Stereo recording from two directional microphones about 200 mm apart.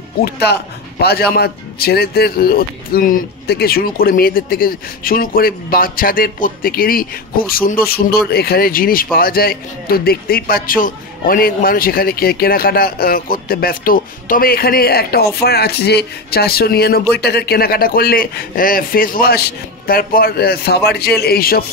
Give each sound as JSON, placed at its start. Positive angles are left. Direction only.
{"t": 0.2, "sound": "speech", "side_deg": 55}